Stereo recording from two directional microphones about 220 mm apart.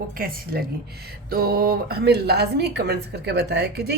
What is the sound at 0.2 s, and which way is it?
Speech, 40° right (ahead or behind).